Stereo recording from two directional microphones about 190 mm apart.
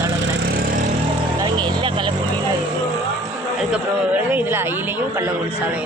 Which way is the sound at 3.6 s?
5° right (ahead or behind).